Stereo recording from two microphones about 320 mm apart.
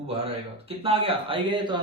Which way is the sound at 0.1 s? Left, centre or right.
Centre.